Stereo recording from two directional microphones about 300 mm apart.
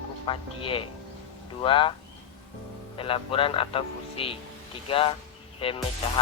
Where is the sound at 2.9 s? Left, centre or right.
Centre.